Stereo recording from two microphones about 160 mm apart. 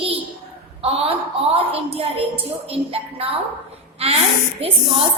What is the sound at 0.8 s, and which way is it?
A woman's voice, 40° right (ahead or behind).